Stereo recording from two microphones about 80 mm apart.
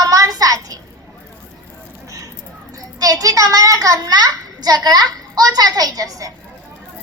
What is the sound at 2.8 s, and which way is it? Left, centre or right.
A child's voice, right.